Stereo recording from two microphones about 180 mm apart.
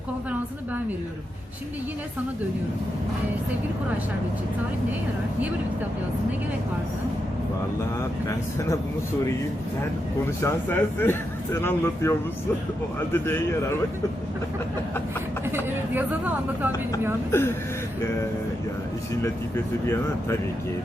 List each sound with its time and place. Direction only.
10.4 s a man's voice: 10° left (ahead or behind)
13.1 s a man's voice: 10° left (ahead or behind)
15.5 s speech: 10° right (ahead or behind)
17.3 s a man's voice: 15° left (ahead or behind)